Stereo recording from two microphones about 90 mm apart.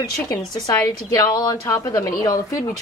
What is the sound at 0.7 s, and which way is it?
A woman's voice, 40° left (ahead or behind).